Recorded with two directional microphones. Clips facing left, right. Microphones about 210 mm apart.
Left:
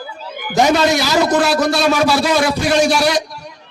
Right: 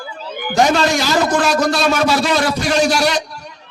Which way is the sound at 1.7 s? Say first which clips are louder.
Left 1 dB; centre (ahead or behind).